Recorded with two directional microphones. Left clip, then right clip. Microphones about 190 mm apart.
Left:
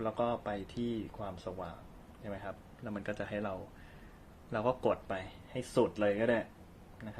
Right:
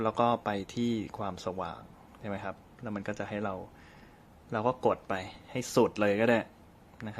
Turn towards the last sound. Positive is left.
turn(degrees=-35)  # may be behind; listen again after turning